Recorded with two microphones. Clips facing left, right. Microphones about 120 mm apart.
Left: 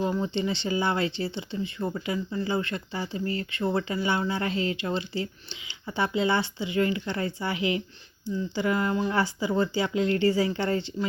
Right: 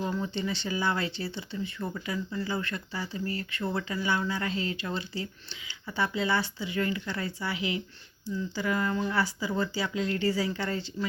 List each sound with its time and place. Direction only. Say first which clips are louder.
0.0 s speech: left 4 dB; 25° left (ahead or behind)